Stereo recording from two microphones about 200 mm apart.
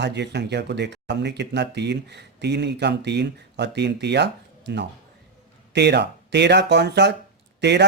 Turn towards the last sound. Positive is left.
turn(degrees=-60)  # may be behind; listen again after turning